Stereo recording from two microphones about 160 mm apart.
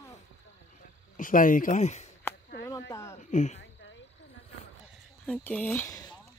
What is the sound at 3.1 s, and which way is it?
Speech, 50° left (ahead or behind).